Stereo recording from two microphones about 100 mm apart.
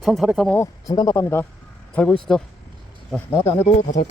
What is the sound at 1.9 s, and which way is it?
Speech, 10° left (ahead or behind).